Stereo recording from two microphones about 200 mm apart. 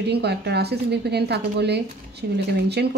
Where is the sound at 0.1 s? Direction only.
55° right (ahead or behind).